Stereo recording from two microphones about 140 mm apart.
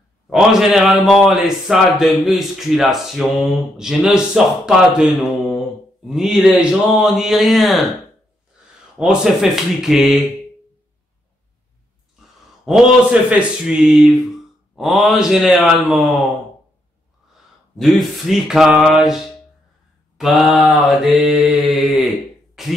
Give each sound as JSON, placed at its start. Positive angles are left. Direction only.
{"t": 0.3, "sound": "a man's voice", "side_deg": -5}
{"t": 8.9, "sound": "a man's voice", "side_deg": -5}
{"t": 12.6, "sound": "a man's voice", "side_deg": -5}
{"t": 17.7, "sound": "a man's voice", "side_deg": 0}
{"t": 20.2, "sound": "mantra", "side_deg": 0}